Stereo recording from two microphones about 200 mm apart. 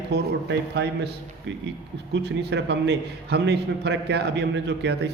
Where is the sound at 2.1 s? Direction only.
60° right (ahead or behind).